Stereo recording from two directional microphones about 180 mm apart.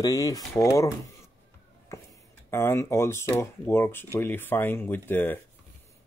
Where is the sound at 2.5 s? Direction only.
15° left (ahead or behind).